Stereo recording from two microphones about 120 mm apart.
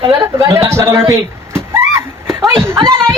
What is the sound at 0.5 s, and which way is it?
Speech, 20° right (ahead or behind).